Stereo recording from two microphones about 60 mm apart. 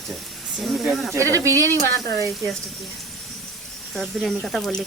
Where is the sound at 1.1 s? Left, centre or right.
Right.